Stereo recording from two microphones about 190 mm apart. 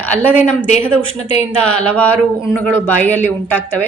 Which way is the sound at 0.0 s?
10° left (ahead or behind).